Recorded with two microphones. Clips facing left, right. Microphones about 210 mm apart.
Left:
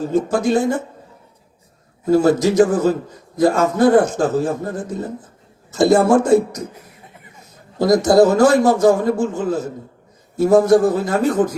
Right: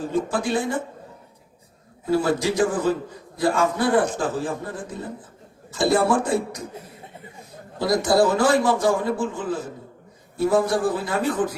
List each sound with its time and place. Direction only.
0.0 s a man's voice: 45° left (ahead or behind)
2.0 s a man's voice: 45° left (ahead or behind)
7.8 s a man's voice: 45° left (ahead or behind)